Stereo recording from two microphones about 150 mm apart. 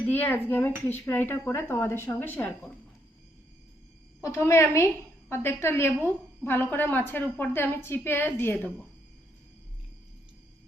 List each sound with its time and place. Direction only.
0.1 s speech: 15° left (ahead or behind)
4.2 s a woman's voice: 20° left (ahead or behind)